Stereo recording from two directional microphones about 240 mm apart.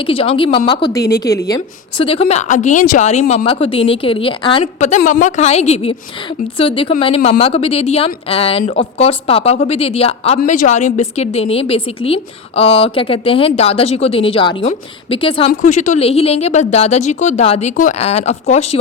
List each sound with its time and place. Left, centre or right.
0.0 s speech: left